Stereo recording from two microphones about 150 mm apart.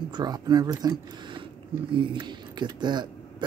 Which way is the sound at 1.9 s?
35° right (ahead or behind).